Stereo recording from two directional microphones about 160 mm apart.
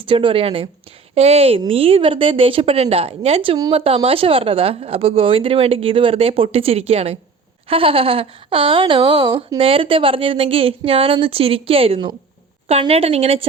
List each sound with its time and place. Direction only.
0.0 s speech: 35° right (ahead or behind)